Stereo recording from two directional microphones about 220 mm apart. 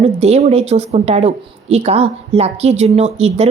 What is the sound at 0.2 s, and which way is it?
Speech, 30° right (ahead or behind).